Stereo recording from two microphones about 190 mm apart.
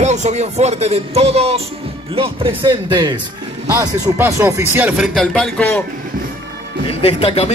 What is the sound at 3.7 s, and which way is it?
Speech, 15° right (ahead or behind).